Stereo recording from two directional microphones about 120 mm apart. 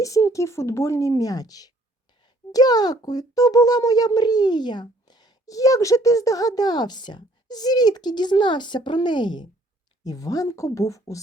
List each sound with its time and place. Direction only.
0.0 s a child's voice: 25° left (ahead or behind)